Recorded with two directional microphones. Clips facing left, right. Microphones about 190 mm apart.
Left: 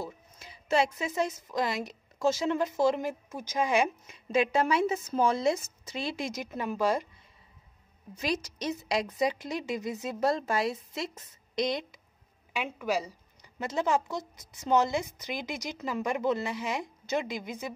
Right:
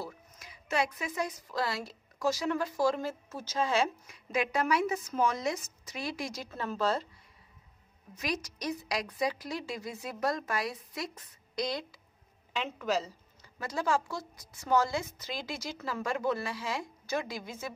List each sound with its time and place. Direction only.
0.0 s a woman's voice: 30° left (ahead or behind)
8.1 s a woman's voice: 25° left (ahead or behind)
12.5 s a woman's voice: 10° left (ahead or behind)